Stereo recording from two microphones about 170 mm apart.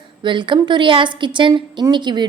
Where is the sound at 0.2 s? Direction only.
25° right (ahead or behind).